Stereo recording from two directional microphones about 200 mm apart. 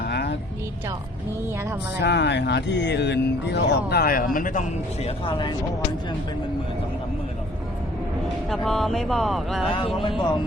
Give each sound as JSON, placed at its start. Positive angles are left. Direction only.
{"t": 0.0, "sound": "music", "side_deg": 55}
{"t": 2.0, "sound": "speech", "side_deg": 60}
{"t": 5.0, "sound": "speech", "side_deg": 25}
{"t": 8.4, "sound": "speech", "side_deg": 0}
{"t": 9.7, "sound": "speech", "side_deg": 25}